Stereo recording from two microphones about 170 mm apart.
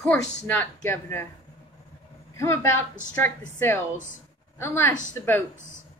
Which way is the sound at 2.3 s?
15° left (ahead or behind).